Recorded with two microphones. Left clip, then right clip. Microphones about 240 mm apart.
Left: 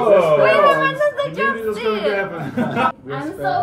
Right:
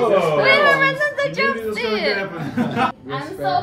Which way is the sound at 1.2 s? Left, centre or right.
Right.